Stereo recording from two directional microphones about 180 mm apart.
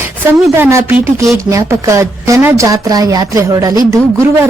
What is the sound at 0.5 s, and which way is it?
Speech, 10° right (ahead or behind).